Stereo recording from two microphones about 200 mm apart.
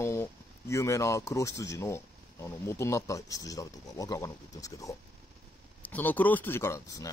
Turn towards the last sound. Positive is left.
turn(degrees=15)  # may be behind; listen again after turning